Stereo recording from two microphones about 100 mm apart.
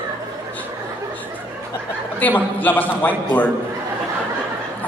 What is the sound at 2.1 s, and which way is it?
A man's voice, 15° left (ahead or behind).